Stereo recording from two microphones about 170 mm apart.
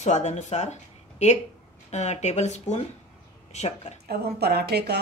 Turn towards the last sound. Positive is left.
turn(degrees=-70)  # may be behind; listen again after turning